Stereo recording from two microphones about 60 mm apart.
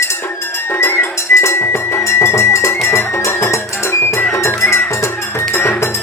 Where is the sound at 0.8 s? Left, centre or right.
Left.